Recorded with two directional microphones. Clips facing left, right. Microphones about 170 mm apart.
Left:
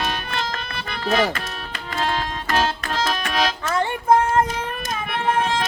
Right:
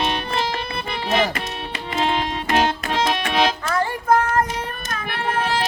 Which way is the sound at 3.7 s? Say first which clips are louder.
Left 2 dB; 25° left (ahead or behind).